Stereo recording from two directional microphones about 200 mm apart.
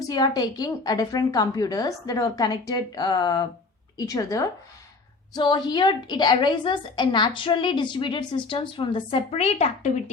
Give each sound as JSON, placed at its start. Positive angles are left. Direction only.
{"t": 0.1, "sound": "a woman's voice", "side_deg": 20}